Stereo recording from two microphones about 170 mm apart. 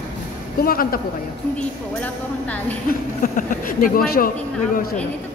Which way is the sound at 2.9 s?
50° left (ahead or behind).